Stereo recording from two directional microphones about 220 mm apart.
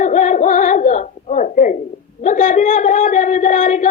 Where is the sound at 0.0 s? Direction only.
35° left (ahead or behind).